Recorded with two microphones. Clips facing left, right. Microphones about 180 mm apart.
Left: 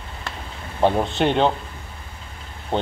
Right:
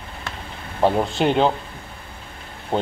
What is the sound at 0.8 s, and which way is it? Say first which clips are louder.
Speech: even; 5° right (ahead or behind).